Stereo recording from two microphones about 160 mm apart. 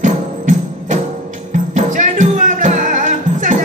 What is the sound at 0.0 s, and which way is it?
Music, 55° right (ahead or behind).